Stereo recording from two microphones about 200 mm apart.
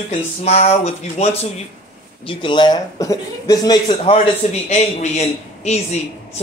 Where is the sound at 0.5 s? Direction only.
35° left (ahead or behind).